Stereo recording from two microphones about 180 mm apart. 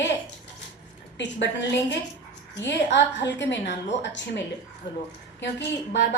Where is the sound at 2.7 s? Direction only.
75° left (ahead or behind).